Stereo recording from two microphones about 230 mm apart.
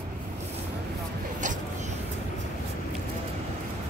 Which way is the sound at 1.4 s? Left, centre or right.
Right.